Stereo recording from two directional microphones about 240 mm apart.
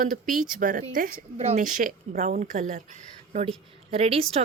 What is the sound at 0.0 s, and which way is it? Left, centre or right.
A woman's voice, right.